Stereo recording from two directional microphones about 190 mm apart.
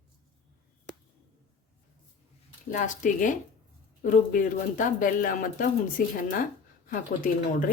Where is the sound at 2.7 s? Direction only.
45° left (ahead or behind).